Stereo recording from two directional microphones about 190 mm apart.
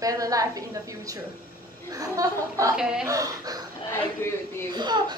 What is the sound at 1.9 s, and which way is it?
Speech, 20° right (ahead or behind).